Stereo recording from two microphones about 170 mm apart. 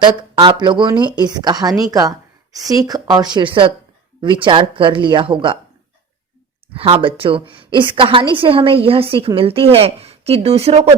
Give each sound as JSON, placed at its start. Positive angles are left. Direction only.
{"t": 0.0, "sound": "speech", "side_deg": -25}
{"t": 1.9, "sound": "a sound", "side_deg": -20}
{"t": 2.6, "sound": "speech", "side_deg": -20}
{"t": 6.7, "sound": "a woman's voice", "side_deg": -30}